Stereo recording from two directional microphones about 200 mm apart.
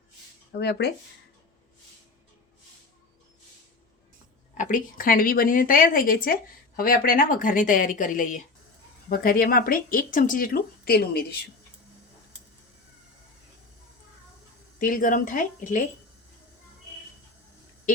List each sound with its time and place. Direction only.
0.5 s speech: 55° left (ahead or behind)
4.5 s a woman's voice: 40° left (ahead or behind)
14.8 s speech: 45° left (ahead or behind)